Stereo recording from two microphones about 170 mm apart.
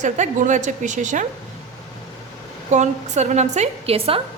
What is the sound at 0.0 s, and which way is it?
A woman's voice, 45° right (ahead or behind).